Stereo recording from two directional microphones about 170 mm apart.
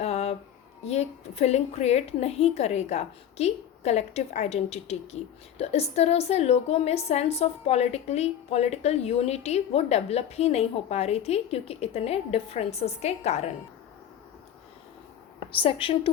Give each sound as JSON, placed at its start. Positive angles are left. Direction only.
{"t": 0.0, "sound": "a sound", "side_deg": 40}
{"t": 0.9, "sound": "a woman's voice", "side_deg": 40}
{"t": 15.5, "sound": "a woman's voice", "side_deg": 30}